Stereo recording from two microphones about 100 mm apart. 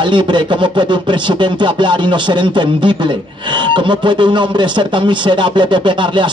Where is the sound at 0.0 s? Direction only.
50° right (ahead or behind).